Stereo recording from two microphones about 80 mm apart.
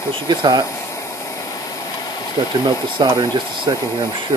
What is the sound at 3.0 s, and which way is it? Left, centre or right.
Speech, right.